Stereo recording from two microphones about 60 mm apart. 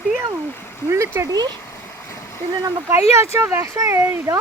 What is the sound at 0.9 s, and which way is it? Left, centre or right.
Speech, right.